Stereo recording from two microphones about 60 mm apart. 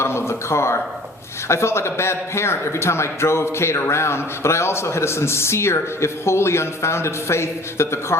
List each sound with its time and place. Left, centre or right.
0.0 s speech: left